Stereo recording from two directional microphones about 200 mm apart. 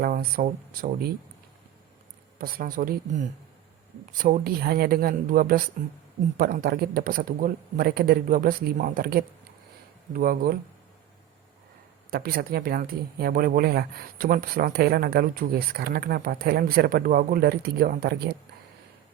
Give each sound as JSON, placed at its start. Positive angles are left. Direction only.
{"t": 0.0, "sound": "speech", "side_deg": -45}
{"t": 2.4, "sound": "speech", "side_deg": -45}
{"t": 12.1, "sound": "speech", "side_deg": -50}